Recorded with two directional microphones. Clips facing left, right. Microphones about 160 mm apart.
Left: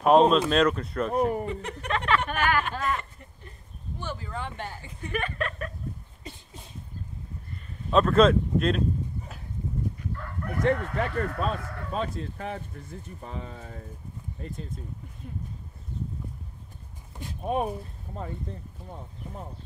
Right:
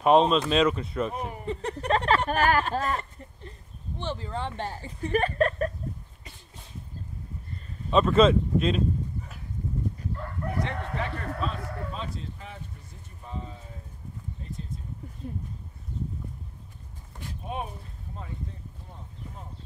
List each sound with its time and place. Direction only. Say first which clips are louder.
0.0 s speech: left 1 dB; centre (ahead or behind)
1.1 s speech: left 10 dB; 45° left (ahead or behind)
1.4 s speech: right 1 dB; 35° right (ahead or behind)
7.9 s speech: even; centre (ahead or behind)
10.6 s speech: left 9 dB; 45° left (ahead or behind)
13.2 s speech: right 1 dB; 70° left (ahead or behind)
17.4 s speech: left 7 dB; 50° left (ahead or behind)